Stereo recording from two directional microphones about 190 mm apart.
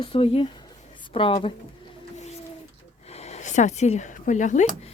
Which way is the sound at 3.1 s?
35° left (ahead or behind).